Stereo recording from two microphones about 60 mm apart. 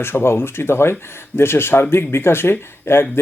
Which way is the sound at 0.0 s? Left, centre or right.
Left.